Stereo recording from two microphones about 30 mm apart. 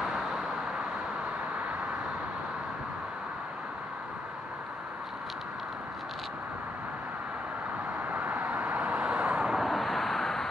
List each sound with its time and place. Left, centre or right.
0.1 s vehicle: right
8.1 s vehicle: right
9.6 s vehicle: centre